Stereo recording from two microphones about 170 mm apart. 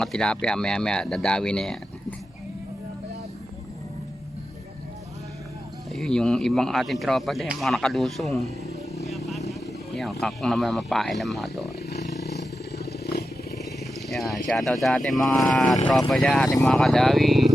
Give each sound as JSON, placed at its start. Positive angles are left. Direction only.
{"t": 0.0, "sound": "speech", "side_deg": 5}
{"t": 5.9, "sound": "speech", "side_deg": 5}
{"t": 9.0, "sound": "vehicle", "side_deg": 0}
{"t": 9.9, "sound": "speech", "side_deg": 0}
{"t": 11.6, "sound": "vehicle", "side_deg": 70}
{"t": 14.1, "sound": "speech", "side_deg": 0}